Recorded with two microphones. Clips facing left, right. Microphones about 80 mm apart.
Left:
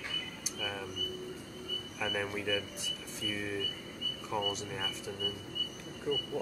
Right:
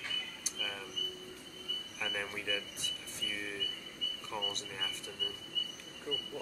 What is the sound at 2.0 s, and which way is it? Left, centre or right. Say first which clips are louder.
Speech: left 5 dB; centre.